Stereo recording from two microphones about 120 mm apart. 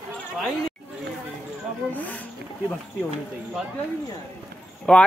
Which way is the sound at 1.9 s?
15° left (ahead or behind).